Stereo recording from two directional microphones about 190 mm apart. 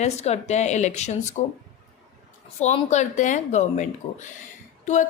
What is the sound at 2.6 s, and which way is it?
A woman's voice, 35° left (ahead or behind).